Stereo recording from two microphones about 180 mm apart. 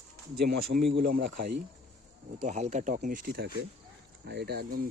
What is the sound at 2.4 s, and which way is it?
Speech, 40° right (ahead or behind).